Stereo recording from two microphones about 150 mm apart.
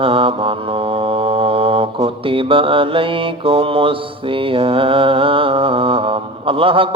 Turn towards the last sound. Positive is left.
turn(degrees=-35)  # may be behind; listen again after turning